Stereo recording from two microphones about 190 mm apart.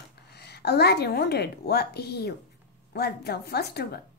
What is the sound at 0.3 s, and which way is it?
A woman's voice, 60° left (ahead or behind).